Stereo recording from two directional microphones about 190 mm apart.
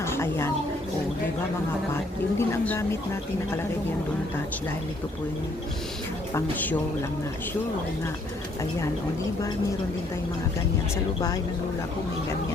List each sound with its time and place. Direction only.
0.0 s a sound: 15° left (ahead or behind)
2.4 s speech: 15° left (ahead or behind)
6.3 s speech: 10° left (ahead or behind)
10.9 s speech: 20° left (ahead or behind)